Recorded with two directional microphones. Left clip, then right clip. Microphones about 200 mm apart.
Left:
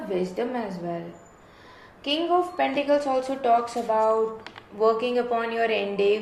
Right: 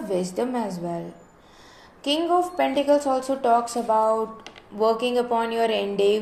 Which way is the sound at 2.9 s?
55° right (ahead or behind).